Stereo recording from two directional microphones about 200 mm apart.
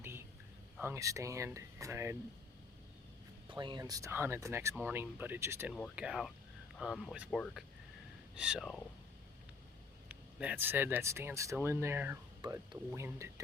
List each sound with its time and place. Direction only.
0.0 s a sound: 10° right (ahead or behind)
0.8 s speech: 15° right (ahead or behind)
3.5 s speech: 25° right (ahead or behind)
5.7 s speech: centre (ahead or behind)
10.1 s speech: 10° right (ahead or behind)
12.4 s speech: 20° right (ahead or behind)